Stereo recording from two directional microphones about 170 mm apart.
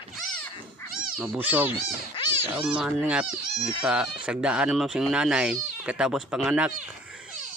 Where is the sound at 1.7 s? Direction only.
30° left (ahead or behind).